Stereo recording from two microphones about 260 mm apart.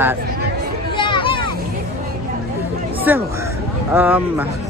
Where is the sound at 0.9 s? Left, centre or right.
Centre.